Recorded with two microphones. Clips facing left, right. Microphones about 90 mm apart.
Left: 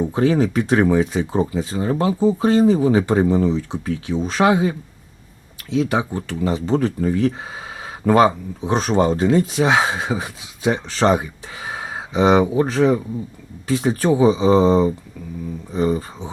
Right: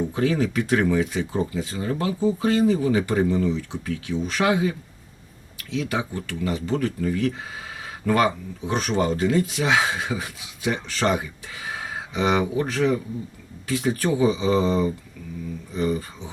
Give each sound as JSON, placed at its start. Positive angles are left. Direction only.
{"t": 0.0, "sound": "speech", "side_deg": 30}
{"t": 5.7, "sound": "speech", "side_deg": 30}